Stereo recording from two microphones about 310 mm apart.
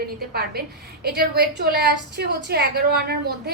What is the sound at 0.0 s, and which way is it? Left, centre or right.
A woman's voice, right.